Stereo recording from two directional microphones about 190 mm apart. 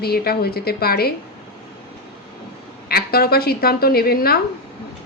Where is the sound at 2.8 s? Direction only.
55° left (ahead or behind).